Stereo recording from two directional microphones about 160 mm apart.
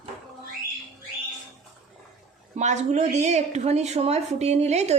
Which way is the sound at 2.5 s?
45° right (ahead or behind).